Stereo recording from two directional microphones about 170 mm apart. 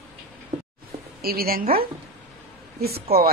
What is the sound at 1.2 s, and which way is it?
Speech, 60° right (ahead or behind).